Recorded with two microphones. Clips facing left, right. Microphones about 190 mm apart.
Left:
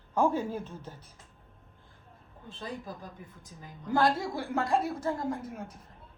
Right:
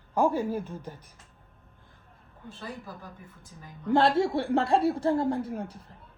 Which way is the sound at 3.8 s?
25° right (ahead or behind).